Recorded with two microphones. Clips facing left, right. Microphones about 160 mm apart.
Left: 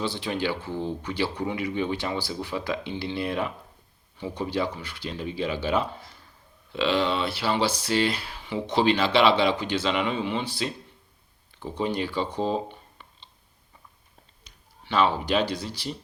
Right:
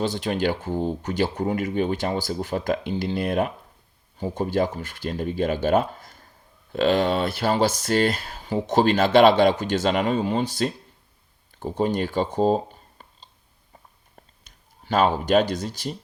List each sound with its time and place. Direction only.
0.0 s speech: 45° right (ahead or behind)
13.0 s a sound: 40° right (ahead or behind)
14.4 s speech: 45° right (ahead or behind)